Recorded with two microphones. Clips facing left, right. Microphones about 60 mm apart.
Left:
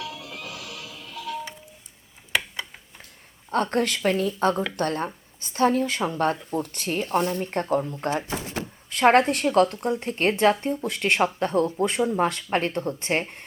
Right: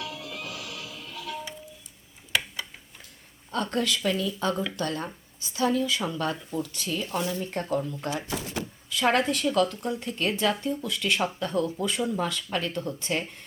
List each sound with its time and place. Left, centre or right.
0.1 s music: left
3.5 s speech: left